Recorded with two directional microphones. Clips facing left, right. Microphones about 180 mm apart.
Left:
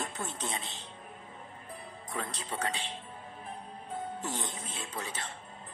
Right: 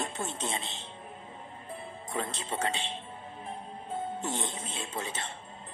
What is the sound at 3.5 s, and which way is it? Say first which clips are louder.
Music: right 3 dB; 25° right (ahead or behind).